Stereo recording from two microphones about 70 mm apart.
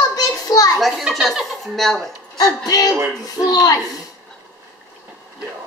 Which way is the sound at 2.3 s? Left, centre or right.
Left.